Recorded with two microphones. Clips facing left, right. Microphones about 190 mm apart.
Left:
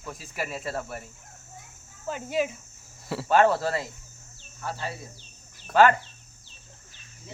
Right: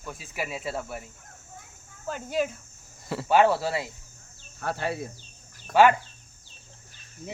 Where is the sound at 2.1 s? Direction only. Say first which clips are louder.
Even; 5° left (ahead or behind).